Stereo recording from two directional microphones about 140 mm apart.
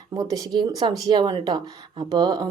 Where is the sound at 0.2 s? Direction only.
25° right (ahead or behind).